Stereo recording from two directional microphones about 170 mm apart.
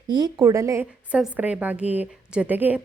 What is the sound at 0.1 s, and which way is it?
A woman's voice, 25° right (ahead or behind).